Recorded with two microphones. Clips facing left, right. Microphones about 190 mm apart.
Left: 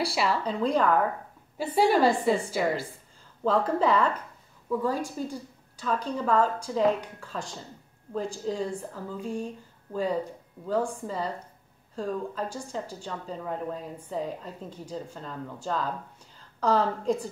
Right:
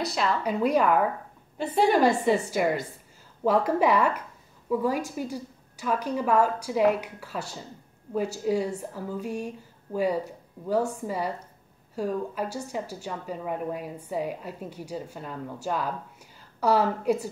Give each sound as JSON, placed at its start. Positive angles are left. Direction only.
{"t": 0.0, "sound": "a woman's voice", "side_deg": 10}
{"t": 0.4, "sound": "a woman's voice", "side_deg": -10}
{"t": 1.6, "sound": "a woman's voice", "side_deg": 5}
{"t": 1.9, "sound": "a woman's voice", "side_deg": -10}